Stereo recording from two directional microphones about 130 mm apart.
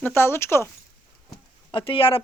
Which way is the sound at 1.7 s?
45° left (ahead or behind).